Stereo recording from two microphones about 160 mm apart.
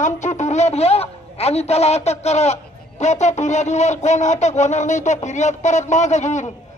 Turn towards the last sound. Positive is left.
turn(degrees=45)  # may be behind; listen again after turning